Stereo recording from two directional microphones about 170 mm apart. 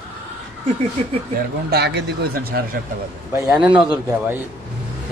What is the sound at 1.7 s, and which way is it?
Speech, 75° right (ahead or behind).